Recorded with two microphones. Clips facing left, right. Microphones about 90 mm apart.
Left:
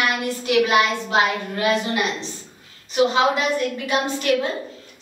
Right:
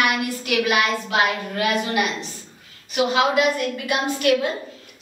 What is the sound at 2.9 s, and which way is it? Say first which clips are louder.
A woman's voice: left 1 dB; 30° left (ahead or behind).